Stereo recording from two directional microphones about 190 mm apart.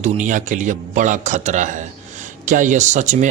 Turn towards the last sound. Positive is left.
turn(degrees=-40)  # may be behind; listen again after turning